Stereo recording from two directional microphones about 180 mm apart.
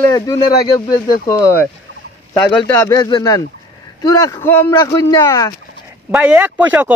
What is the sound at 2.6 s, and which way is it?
Speech, 10° left (ahead or behind).